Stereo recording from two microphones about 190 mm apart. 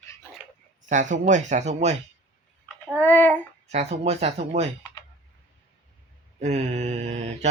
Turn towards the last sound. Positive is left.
turn(degrees=-35)  # may be behind; listen again after turning